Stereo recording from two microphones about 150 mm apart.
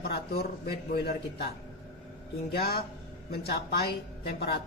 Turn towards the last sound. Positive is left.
turn(degrees=90)